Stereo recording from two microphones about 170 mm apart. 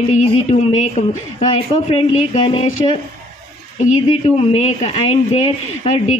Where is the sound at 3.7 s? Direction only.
40° left (ahead or behind).